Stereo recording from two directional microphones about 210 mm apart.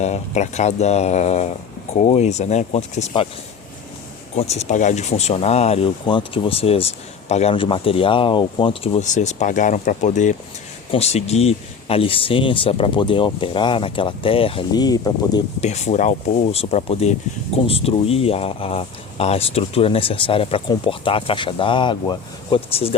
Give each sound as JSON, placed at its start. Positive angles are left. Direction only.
{"t": 0.0, "sound": "speech", "side_deg": 35}
{"t": 4.4, "sound": "speech", "side_deg": 30}
{"t": 15.6, "sound": "speech", "side_deg": 30}